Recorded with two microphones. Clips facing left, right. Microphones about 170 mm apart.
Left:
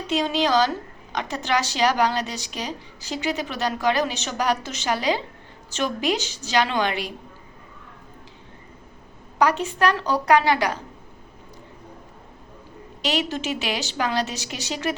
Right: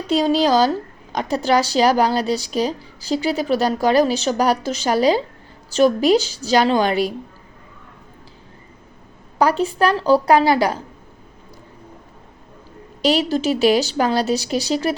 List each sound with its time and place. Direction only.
0.1 s a woman's voice: 35° right (ahead or behind)
9.4 s a woman's voice: 35° right (ahead or behind)
13.0 s a woman's voice: 35° right (ahead or behind)